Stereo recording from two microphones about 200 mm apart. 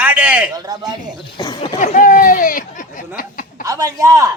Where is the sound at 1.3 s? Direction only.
20° left (ahead or behind).